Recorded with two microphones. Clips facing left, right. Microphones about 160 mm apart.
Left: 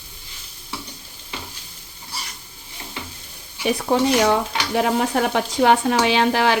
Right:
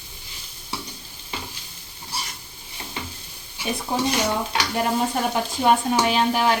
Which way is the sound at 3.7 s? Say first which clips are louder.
Left 5 dB; 70° left (ahead or behind).